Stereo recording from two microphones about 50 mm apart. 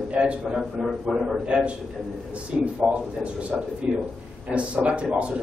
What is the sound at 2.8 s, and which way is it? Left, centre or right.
A man's voice, right.